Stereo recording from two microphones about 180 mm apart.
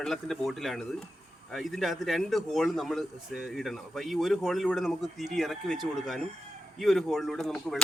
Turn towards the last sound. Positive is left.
turn(degrees=5)  # may be behind; listen again after turning